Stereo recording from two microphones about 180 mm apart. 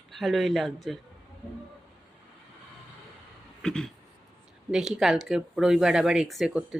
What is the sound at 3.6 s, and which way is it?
Speech, 5° left (ahead or behind).